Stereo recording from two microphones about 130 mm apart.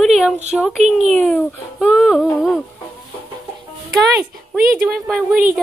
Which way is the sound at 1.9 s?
Centre (ahead or behind).